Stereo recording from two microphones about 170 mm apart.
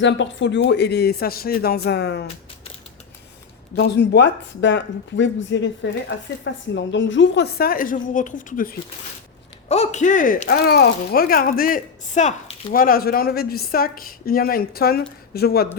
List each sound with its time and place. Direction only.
0.0 s speech: 90° left
3.8 s speech: 90° left; by 8.7 s 50° left (ahead or behind)
9.6 s speech: 40° left (ahead or behind); by 15.8 s 65° left (ahead or behind)